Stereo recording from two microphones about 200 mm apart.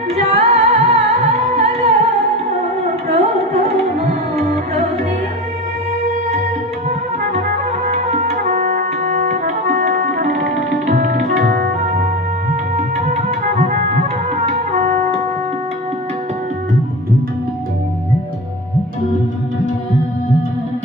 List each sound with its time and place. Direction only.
0.1 s music: 30° right (ahead or behind)
3.1 s music: 30° right (ahead or behind)
7.9 s brass instrument: 35° right (ahead or behind); by 10.2 s 50° right (ahead or behind)
10.8 s music: 45° right (ahead or behind)
12.7 s music: 35° right (ahead or behind)